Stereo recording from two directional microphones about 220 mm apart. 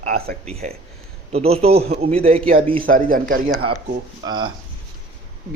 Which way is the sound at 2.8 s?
40° right (ahead or behind).